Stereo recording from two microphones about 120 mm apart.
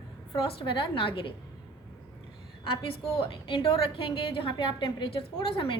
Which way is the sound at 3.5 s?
45° left (ahead or behind).